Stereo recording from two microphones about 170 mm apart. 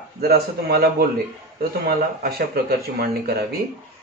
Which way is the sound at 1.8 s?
65° right (ahead or behind).